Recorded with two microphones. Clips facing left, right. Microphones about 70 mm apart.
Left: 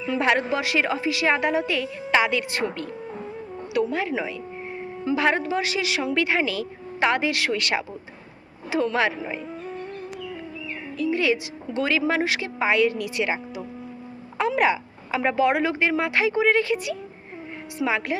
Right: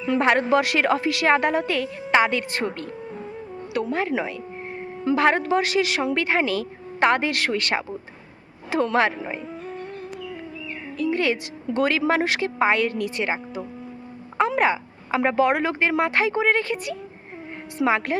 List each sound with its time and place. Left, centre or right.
0.2 s a woman's voice: right
3.8 s a woman's voice: right
9.2 s a sound: centre
10.9 s a woman's voice: right
14.3 s a sound: right
15.4 s speech: right